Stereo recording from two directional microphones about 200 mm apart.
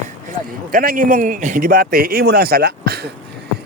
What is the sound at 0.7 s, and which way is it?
A man's voice, 45° right (ahead or behind).